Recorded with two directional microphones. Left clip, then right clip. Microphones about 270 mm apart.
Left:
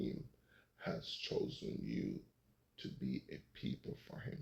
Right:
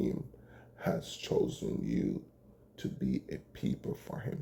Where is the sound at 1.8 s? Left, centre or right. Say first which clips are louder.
Right 9 dB; right.